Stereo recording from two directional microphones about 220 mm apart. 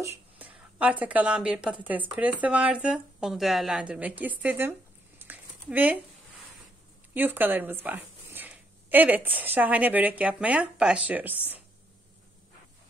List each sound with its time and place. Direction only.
0.4 s speech: 5° right (ahead or behind)
5.2 s a sound: 10° right (ahead or behind)
7.2 s a woman's voice: 10° right (ahead or behind)